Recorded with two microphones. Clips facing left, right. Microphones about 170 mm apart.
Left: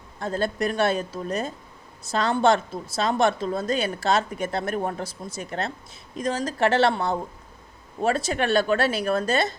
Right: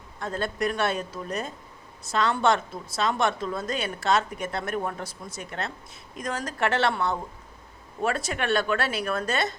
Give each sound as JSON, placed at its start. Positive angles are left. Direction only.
{"t": 0.2, "sound": "a woman's voice", "side_deg": 30}